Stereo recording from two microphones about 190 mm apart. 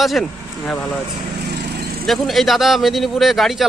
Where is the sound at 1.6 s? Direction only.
55° right (ahead or behind).